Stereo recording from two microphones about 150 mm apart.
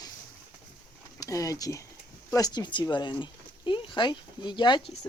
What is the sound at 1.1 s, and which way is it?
Speech, 25° left (ahead or behind).